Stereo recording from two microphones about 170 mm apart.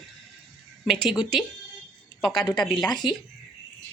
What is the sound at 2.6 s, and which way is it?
Speech, centre (ahead or behind).